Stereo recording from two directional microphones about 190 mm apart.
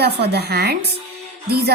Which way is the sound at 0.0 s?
60° right (ahead or behind).